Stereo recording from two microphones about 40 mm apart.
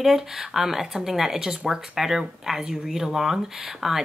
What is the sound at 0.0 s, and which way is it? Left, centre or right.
Speech, centre.